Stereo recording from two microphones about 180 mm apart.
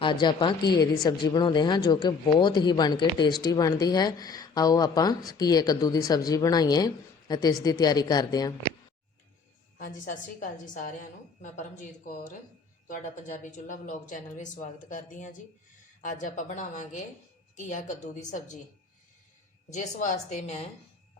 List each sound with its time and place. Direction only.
0.0 s speech: 25° left (ahead or behind)
9.7 s speech: 45° left (ahead or behind)
11.5 s speech: 45° left (ahead or behind)
19.7 s speech: 40° left (ahead or behind)